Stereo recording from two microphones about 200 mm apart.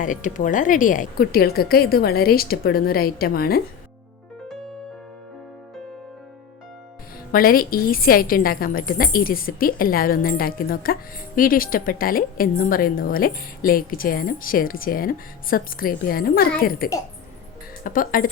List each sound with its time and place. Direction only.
0.0 s a woman's voice: 40° left (ahead or behind)
7.3 s a woman's voice: 45° left (ahead or behind)